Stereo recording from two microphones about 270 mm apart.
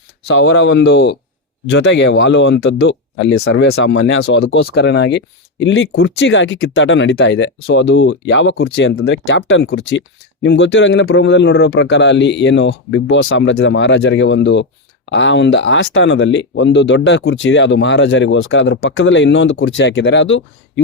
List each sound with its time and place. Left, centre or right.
0.5 s a man's voice: left